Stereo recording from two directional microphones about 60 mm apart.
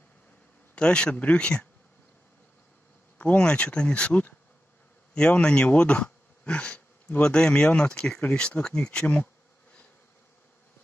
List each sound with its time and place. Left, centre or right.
0.7 s speech: centre
3.3 s speech: centre
5.1 s speech: centre